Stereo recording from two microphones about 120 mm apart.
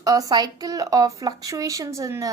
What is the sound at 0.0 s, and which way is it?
A woman's voice, 30° right (ahead or behind).